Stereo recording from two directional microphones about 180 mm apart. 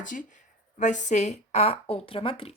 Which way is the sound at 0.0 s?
45° left (ahead or behind).